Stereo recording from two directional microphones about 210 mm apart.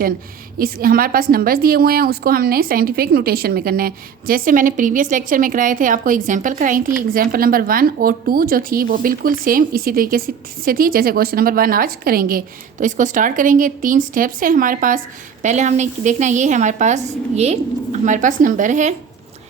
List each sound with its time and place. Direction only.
0.6 s a woman's voice: 45° right (ahead or behind)